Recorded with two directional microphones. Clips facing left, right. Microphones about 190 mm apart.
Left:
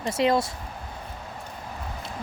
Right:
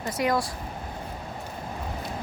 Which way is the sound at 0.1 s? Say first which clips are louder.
Left 3 dB; 25° left (ahead or behind).